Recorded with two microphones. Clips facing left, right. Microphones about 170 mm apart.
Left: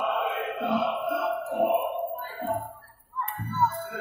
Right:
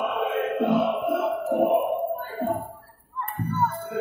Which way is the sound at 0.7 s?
50° right (ahead or behind).